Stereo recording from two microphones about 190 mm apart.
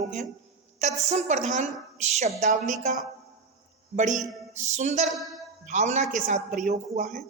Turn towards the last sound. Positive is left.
turn(degrees=-40)  # may be behind; listen again after turning